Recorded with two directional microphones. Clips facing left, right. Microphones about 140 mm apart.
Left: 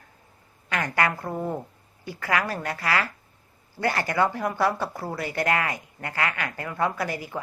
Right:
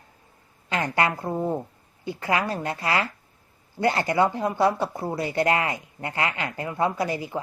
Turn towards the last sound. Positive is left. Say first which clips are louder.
# right 3 dB
turn(degrees=-20)  # may be behind; listen again after turning